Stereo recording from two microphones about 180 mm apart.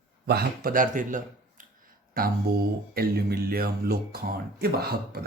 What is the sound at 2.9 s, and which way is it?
Speech, 60° right (ahead or behind).